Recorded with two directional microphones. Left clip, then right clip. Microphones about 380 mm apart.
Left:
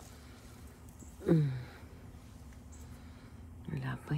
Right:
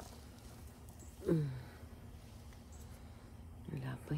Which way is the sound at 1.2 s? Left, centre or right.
Centre.